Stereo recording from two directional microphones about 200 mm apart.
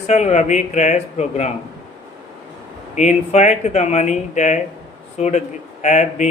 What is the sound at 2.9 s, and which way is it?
A man's voice, 35° left (ahead or behind).